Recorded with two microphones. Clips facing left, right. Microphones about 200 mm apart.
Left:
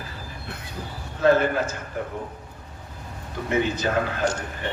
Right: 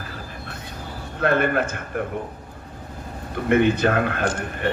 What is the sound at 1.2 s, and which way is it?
Speech, 60° right (ahead or behind).